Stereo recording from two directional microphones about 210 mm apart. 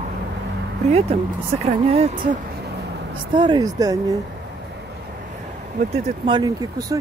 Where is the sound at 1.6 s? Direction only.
30° right (ahead or behind).